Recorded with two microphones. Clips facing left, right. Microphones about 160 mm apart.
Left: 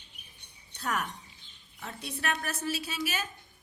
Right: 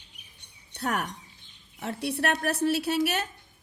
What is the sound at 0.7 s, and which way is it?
Speech, 65° right (ahead or behind).